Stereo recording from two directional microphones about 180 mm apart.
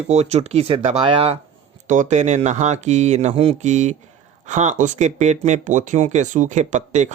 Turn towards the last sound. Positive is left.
turn(degrees=-40)  # may be behind; listen again after turning